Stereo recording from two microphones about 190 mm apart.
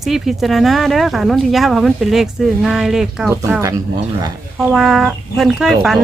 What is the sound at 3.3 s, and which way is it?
Speech, 10° right (ahead or behind).